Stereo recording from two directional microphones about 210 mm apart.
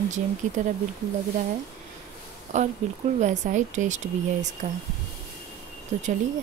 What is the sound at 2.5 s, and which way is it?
Speech, 35° right (ahead or behind).